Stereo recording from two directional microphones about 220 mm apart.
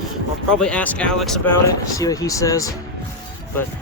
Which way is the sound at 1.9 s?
15° left (ahead or behind).